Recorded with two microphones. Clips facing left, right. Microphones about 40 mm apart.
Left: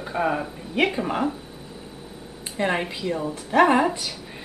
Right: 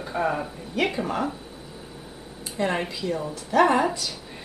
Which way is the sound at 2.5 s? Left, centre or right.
Left.